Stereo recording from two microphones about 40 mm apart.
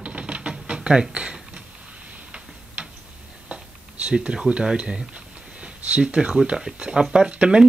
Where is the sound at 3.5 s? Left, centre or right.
Right.